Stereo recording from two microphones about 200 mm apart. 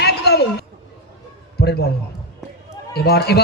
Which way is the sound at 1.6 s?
55° left (ahead or behind).